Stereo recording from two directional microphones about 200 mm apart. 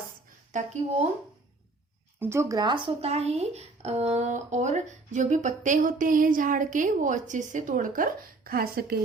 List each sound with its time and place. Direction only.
0.5 s speech: 40° right (ahead or behind)
2.1 s speech: 10° right (ahead or behind); by 9.0 s 50° right (ahead or behind)